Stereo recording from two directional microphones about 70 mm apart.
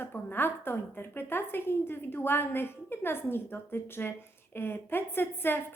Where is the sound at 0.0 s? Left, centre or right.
Left.